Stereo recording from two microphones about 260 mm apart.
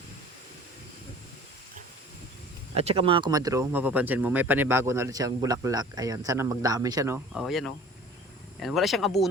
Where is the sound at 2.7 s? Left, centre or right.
Right.